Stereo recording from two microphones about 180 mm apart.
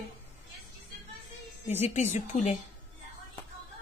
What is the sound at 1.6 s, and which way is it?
Speech, 35° left (ahead or behind).